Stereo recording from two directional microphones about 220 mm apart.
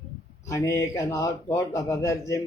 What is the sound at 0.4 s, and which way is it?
A man's voice, 15° left (ahead or behind).